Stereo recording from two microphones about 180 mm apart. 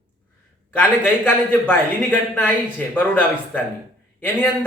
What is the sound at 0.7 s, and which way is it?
A man's voice, 10° left (ahead or behind).